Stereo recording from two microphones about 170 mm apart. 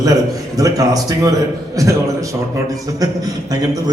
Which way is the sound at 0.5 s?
20° right (ahead or behind).